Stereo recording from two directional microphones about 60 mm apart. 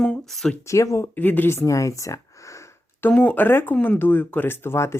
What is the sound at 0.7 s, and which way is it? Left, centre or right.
Speech, left.